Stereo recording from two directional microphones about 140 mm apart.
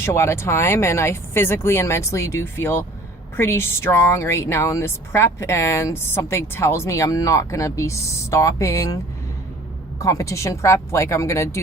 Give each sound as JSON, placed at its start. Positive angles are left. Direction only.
{"t": 0.0, "sound": "speech", "side_deg": 20}
{"t": 10.0, "sound": "speech", "side_deg": 25}